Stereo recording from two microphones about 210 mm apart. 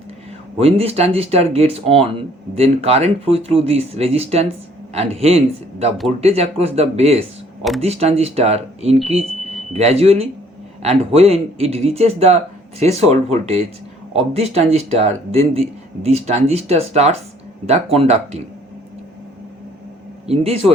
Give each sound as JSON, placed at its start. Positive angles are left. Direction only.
{"t": 0.6, "sound": "speech", "side_deg": -30}
{"t": 20.2, "sound": "speech", "side_deg": -30}